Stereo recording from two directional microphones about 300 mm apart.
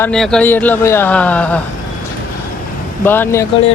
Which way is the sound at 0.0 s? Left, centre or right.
Centre.